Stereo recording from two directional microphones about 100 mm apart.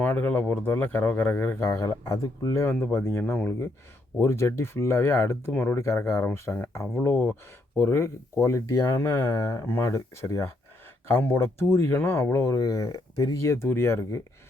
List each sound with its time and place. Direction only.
0.0 s speech: 20° left (ahead or behind)
1.6 s speech: 30° left (ahead or behind)
2.8 s speech: 25° left (ahead or behind)